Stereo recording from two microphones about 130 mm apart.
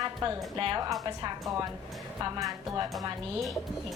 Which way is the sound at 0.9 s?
25° right (ahead or behind).